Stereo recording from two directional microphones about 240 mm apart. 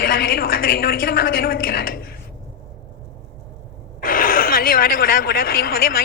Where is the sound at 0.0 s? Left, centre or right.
Left.